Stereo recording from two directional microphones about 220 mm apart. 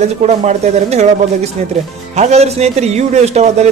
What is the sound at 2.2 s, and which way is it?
A man's voice, 30° right (ahead or behind).